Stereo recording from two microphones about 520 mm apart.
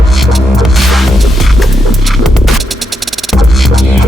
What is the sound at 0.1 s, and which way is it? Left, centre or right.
Music, centre.